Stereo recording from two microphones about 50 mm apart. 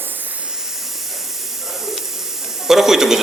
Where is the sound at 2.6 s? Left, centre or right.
Centre.